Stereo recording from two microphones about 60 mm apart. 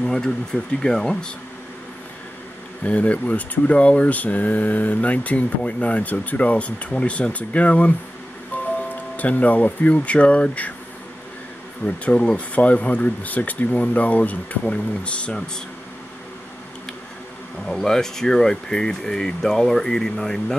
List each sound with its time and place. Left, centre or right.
0.0 s speech: centre
2.8 s speech: left
9.1 s speech: left
11.8 s speech: left
17.6 s speech: centre